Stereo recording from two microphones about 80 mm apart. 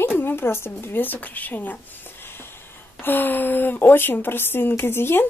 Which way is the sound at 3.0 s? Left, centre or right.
Left.